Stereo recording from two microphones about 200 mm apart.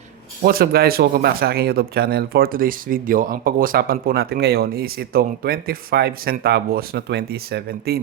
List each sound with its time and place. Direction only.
0.4 s speech: 50° right (ahead or behind)